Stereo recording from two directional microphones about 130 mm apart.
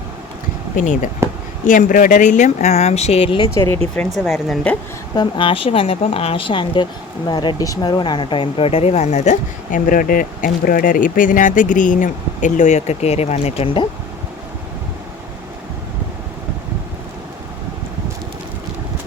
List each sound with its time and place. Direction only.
0.8 s speech: 75° left (ahead or behind); by 3.4 s 45° left (ahead or behind)
3.4 s speech: 20° left (ahead or behind)
4.2 s a woman's voice: centre (ahead or behind)
5.1 s speech: 40° left (ahead or behind)